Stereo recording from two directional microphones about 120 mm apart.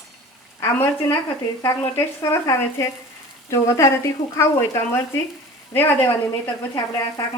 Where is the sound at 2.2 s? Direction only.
20° left (ahead or behind).